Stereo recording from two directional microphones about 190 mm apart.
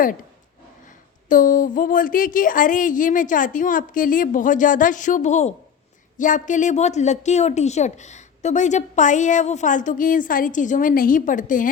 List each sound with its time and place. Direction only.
1.3 s a woman's voice: 45° left (ahead or behind)